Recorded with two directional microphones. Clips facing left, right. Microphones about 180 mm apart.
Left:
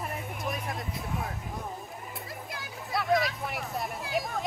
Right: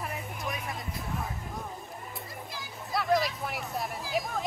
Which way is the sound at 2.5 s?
Centre (ahead or behind).